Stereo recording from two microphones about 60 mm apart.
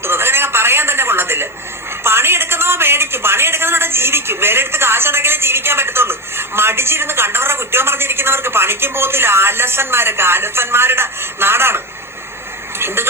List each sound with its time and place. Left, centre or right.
0.0 s telephone: right
2.0 s a sound: right
12.8 s speech: right